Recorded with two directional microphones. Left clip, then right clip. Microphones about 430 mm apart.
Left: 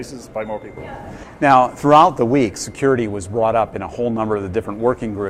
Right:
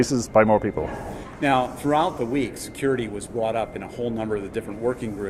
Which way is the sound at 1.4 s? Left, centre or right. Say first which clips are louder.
Left 9 dB; left.